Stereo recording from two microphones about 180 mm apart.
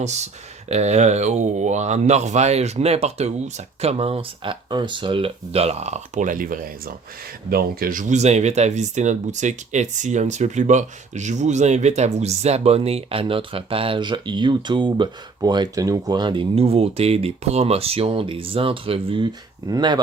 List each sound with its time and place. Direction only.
0.0 s speech: 40° right (ahead or behind); by 20.0 s 20° right (ahead or behind)